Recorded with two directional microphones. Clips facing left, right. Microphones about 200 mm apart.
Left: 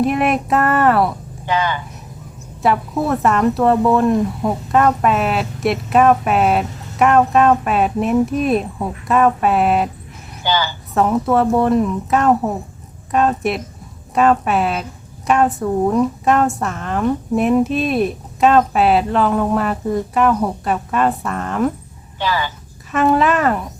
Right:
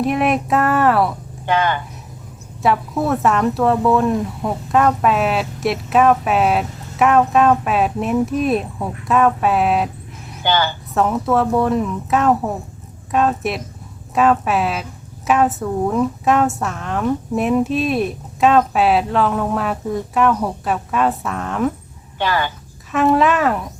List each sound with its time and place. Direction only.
0.0 s speech: centre (ahead or behind)
1.5 s speech: 55° right (ahead or behind)
2.6 s speech: centre (ahead or behind)
10.4 s a woman's voice: 55° right (ahead or behind)
10.9 s speech: centre (ahead or behind)
22.2 s a woman's voice: 55° right (ahead or behind)
22.9 s speech: centre (ahead or behind)